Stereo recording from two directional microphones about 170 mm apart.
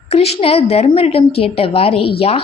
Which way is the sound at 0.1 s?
35° left (ahead or behind).